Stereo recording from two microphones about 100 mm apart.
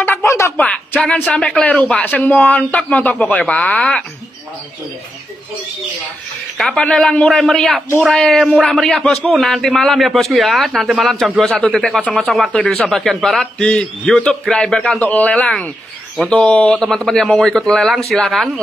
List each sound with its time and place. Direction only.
0.0 s a sound: 25° left (ahead or behind)
1.2 s speech: 5° left (ahead or behind)
6.6 s a man's voice: 5° left (ahead or behind)